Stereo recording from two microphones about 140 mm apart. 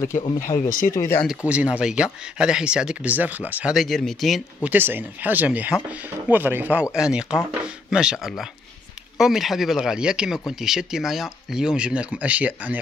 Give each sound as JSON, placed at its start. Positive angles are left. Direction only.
{"t": 0.7, "sound": "speech", "side_deg": 75}
{"t": 0.9, "sound": "speech", "side_deg": 15}
{"t": 1.5, "sound": "speech", "side_deg": -10}
{"t": 3.7, "sound": "speech", "side_deg": 0}
{"t": 4.6, "sound": "speech", "side_deg": -15}